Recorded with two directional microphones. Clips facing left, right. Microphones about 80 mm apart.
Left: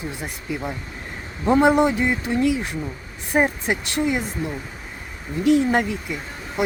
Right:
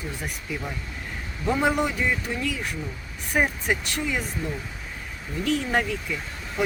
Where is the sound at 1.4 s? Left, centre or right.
Left.